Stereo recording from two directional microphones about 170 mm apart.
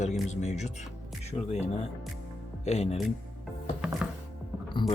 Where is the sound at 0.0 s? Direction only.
45° left (ahead or behind).